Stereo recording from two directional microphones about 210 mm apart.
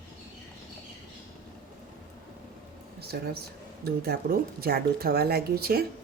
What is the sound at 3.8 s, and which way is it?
Speech, 45° right (ahead or behind).